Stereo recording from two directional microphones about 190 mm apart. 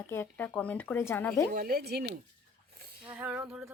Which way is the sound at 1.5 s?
50° right (ahead or behind).